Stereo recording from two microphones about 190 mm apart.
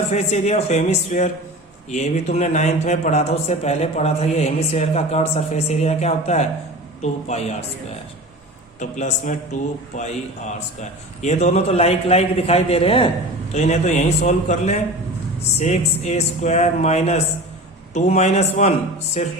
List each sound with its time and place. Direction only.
0.1 s speech: 35° left (ahead or behind)
8.8 s speech: 40° left (ahead or behind)
11.2 s speech: 35° left (ahead or behind)